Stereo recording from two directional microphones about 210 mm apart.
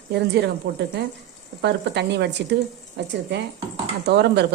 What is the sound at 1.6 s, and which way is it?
Speech, 55° right (ahead or behind).